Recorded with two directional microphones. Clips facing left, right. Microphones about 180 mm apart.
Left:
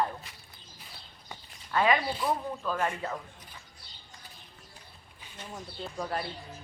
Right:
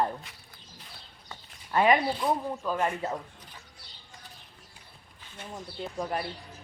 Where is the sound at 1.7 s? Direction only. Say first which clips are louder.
Right 3 dB; 20° right (ahead or behind).